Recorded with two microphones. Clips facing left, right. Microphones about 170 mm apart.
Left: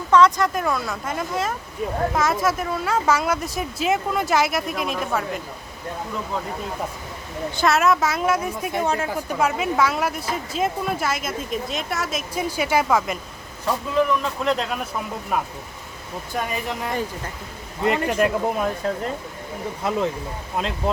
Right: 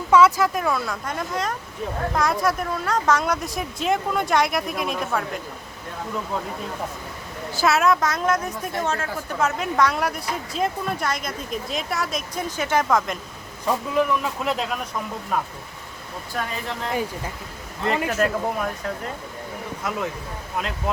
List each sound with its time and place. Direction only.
0.1 s a woman's voice: 5° right (ahead or behind)
7.5 s a woman's voice: centre (ahead or behind)
13.9 s a woman's voice: 5° right (ahead or behind)
16.3 s speech: 15° left (ahead or behind)
19.8 s speech: 30° left (ahead or behind)